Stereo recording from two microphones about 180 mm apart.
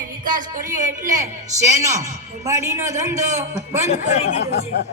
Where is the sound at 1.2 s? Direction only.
15° right (ahead or behind).